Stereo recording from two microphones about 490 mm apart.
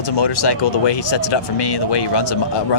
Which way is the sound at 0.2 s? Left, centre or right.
Left.